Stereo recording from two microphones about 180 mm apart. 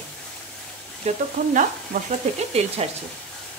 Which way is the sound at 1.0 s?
45° right (ahead or behind).